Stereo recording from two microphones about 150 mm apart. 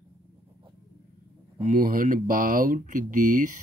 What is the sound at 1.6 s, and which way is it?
Speech, 65° right (ahead or behind).